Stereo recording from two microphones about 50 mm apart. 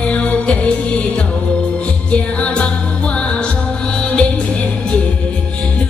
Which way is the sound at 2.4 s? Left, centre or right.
Left.